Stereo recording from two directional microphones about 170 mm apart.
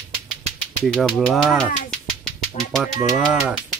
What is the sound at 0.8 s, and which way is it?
Speech, centre (ahead or behind).